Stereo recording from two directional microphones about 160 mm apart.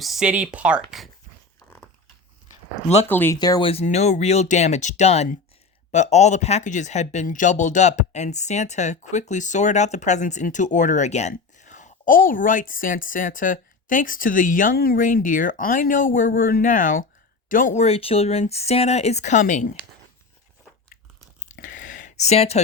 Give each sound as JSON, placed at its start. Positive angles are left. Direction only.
{"t": 0.0, "sound": "speech", "side_deg": 0}
{"t": 3.1, "sound": "speech", "side_deg": 10}
{"t": 3.3, "sound": "speech", "side_deg": 25}
{"t": 3.7, "sound": "speech", "side_deg": 40}
{"t": 17.8, "sound": "speech", "side_deg": 35}
{"t": 21.6, "sound": "a sound", "side_deg": 55}